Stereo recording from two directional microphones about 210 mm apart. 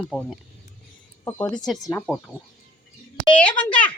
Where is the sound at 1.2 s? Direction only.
15° left (ahead or behind).